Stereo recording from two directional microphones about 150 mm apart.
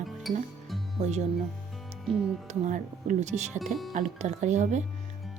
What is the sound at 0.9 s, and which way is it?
Speech, 50° right (ahead or behind).